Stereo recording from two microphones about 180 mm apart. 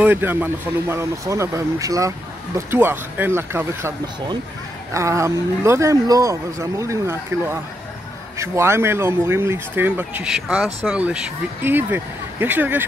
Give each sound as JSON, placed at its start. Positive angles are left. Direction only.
{"t": 0.0, "sound": "speech", "side_deg": -10}
{"t": 4.9, "sound": "speech", "side_deg": -15}